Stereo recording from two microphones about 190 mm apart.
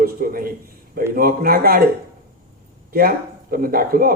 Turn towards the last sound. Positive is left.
turn(degrees=-50)  # may be behind; listen again after turning